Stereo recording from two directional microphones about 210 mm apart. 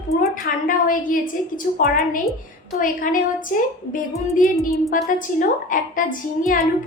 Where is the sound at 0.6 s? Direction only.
40° left (ahead or behind).